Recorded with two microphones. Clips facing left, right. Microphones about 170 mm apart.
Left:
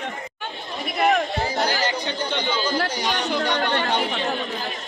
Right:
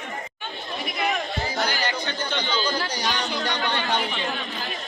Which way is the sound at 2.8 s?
55° left (ahead or behind).